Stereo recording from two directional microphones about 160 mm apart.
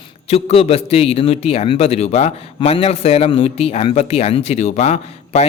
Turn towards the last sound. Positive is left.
turn(degrees=40)  # may be behind; listen again after turning